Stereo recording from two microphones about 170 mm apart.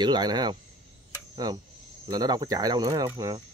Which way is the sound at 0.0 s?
25° right (ahead or behind).